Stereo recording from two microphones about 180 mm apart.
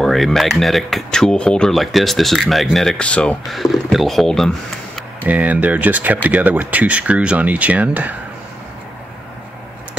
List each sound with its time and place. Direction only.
0.0 s speech: centre (ahead or behind)
5.2 s speech: 10° right (ahead or behind)